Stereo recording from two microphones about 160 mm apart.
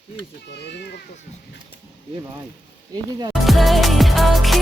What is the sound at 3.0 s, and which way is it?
Speech, 25° right (ahead or behind).